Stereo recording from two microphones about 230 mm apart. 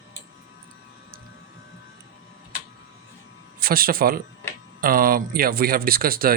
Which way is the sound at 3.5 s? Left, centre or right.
Right.